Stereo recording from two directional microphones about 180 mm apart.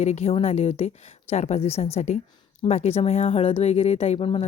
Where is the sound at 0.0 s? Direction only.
40° left (ahead or behind).